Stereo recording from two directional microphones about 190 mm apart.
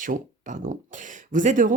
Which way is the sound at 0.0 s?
40° right (ahead or behind).